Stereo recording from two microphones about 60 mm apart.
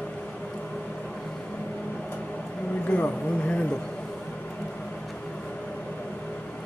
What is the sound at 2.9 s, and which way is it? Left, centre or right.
Speech, left.